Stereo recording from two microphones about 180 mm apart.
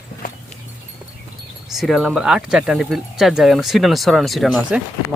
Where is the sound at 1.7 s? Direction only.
Centre (ahead or behind).